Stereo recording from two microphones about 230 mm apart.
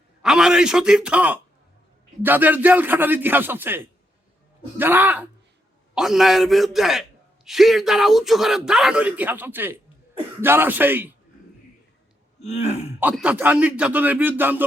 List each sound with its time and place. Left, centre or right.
0.2 s a man's voice: centre
12.4 s throat clearing: left
13.0 s a man's voice: centre